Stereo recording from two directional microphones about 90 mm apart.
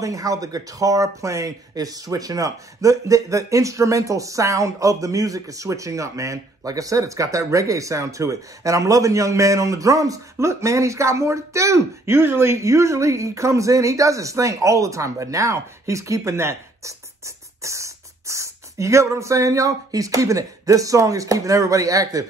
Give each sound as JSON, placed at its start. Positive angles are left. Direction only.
{"t": 0.0, "sound": "speech", "side_deg": -40}